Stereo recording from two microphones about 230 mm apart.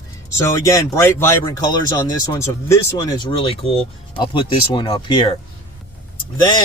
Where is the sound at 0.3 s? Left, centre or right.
Centre.